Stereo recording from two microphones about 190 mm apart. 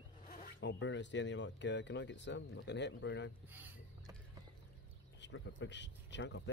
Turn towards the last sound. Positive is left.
turn(degrees=70)  # may be behind; listen again after turning